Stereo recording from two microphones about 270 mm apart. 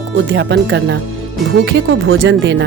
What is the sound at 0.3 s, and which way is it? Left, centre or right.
Speech, right.